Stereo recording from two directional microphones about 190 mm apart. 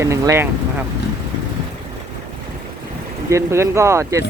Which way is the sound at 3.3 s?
15° right (ahead or behind).